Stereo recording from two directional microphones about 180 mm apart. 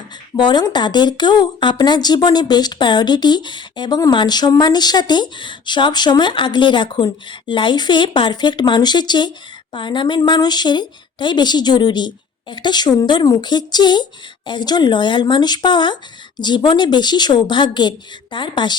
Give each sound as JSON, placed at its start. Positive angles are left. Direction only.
{"t": 0.3, "sound": "a woman's voice", "side_deg": 25}